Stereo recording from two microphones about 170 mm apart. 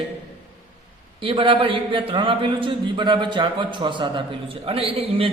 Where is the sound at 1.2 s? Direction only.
30° right (ahead or behind).